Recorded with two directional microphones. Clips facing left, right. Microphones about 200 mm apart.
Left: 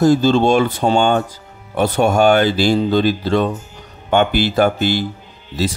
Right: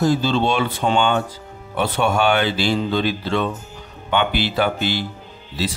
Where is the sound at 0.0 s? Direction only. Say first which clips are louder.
Left 6 dB; 45° left (ahead or behind).